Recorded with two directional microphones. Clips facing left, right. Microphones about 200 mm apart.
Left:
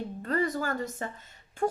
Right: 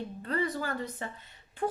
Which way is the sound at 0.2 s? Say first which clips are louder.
Left 3 dB; 45° left (ahead or behind).